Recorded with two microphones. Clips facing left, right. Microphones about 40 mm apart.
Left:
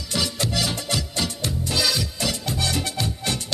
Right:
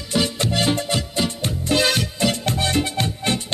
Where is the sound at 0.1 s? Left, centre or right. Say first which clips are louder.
Right 4 dB; right.